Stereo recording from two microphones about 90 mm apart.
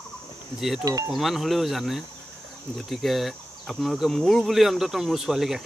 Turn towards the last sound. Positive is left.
turn(degrees=-5)  # may be behind; listen again after turning